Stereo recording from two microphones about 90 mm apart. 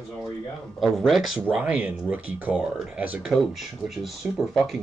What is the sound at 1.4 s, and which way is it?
Speech, 20° right (ahead or behind).